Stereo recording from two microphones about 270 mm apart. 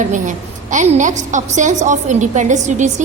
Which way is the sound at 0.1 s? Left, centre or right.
Right.